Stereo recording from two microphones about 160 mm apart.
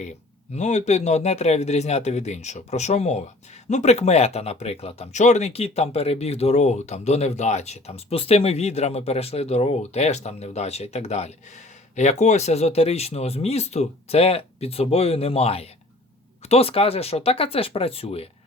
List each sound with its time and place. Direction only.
0.5 s speech: 45° left (ahead or behind)